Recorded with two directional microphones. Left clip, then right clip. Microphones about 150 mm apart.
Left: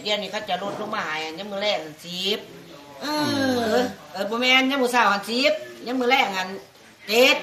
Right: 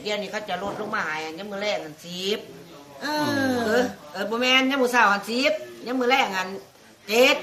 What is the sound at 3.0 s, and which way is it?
Speech, 15° right (ahead or behind).